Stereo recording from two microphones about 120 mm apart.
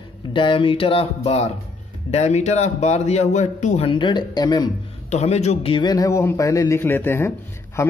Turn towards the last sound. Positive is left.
turn(degrees=25)  # may be behind; listen again after turning